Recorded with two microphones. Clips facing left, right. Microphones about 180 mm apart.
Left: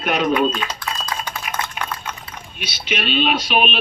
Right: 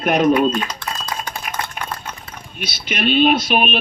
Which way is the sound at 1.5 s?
45° right (ahead or behind).